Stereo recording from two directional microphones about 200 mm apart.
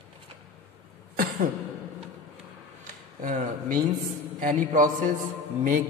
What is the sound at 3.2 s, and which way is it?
A man's voice, 40° right (ahead or behind).